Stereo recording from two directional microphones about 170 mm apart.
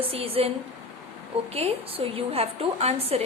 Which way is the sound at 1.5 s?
35° right (ahead or behind).